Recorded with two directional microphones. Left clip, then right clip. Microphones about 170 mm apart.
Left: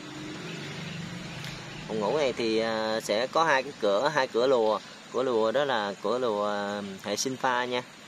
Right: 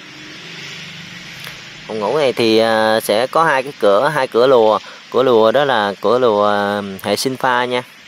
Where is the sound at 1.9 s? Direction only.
45° right (ahead or behind).